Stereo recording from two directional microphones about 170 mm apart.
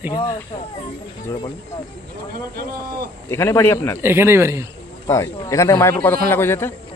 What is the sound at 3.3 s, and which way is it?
Speech, 15° left (ahead or behind).